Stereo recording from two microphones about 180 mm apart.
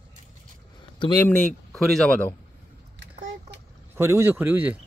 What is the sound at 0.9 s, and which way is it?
Speech, 25° left (ahead or behind).